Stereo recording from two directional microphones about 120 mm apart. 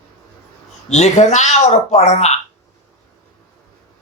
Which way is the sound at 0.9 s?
70° left (ahead or behind).